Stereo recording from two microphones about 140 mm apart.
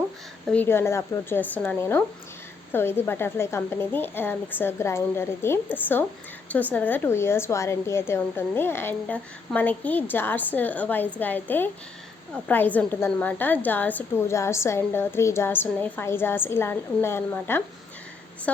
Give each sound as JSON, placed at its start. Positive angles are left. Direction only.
{"t": 0.4, "sound": "a woman's voice", "side_deg": 10}